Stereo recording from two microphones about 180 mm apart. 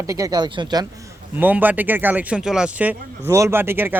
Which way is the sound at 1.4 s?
10° right (ahead or behind).